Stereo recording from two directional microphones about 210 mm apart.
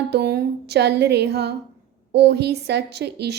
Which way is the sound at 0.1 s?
50° right (ahead or behind).